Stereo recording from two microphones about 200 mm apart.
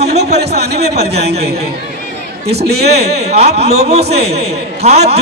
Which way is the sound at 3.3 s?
30° right (ahead or behind).